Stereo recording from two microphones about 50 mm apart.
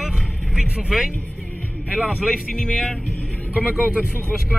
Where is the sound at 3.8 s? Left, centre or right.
Right.